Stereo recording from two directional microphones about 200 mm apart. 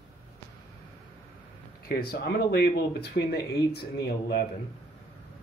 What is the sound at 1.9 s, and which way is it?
Speech, 50° left (ahead or behind).